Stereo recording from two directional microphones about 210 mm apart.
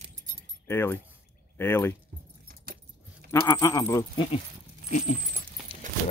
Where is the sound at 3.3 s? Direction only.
15° left (ahead or behind).